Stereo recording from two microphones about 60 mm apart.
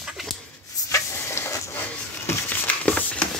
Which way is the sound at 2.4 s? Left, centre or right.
Left.